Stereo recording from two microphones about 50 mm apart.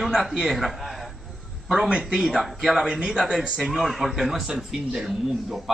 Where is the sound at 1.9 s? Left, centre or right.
Right.